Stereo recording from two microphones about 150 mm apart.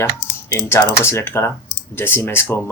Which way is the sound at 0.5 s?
15° left (ahead or behind).